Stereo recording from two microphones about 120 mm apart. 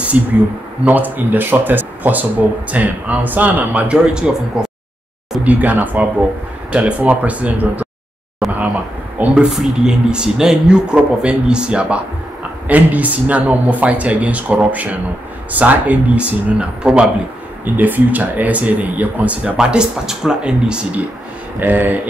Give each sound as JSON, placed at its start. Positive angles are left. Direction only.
{"t": 0.1, "sound": "speech", "side_deg": -10}
{"t": 9.2, "sound": "speech", "side_deg": -10}